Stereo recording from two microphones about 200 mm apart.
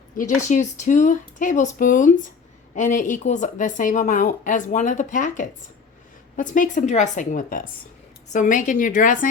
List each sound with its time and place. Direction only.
0.2 s speech: 40° left (ahead or behind)